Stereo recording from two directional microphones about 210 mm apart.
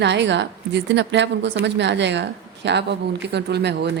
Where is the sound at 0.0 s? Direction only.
55° right (ahead or behind).